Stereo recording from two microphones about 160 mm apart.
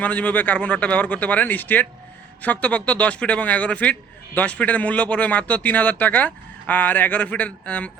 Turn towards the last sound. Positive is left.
turn(degrees=10)  # may be behind; listen again after turning